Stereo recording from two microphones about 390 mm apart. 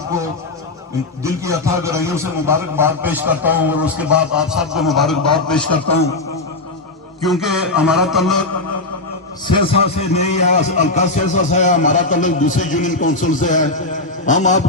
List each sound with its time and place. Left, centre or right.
1.2 s a man's voice: centre
7.3 s a man's voice: centre
9.5 s a man's voice: centre